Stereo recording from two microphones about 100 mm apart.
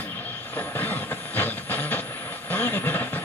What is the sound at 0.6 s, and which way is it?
Vehicle, 20° left (ahead or behind).